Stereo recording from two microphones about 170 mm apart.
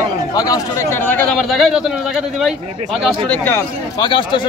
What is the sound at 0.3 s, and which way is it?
Speech, 20° left (ahead or behind).